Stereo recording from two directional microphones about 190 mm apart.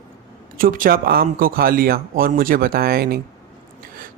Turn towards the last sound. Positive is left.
turn(degrees=-55)  # may be behind; listen again after turning